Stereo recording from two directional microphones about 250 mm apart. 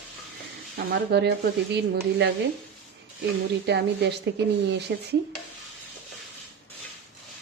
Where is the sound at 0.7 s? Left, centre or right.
Right.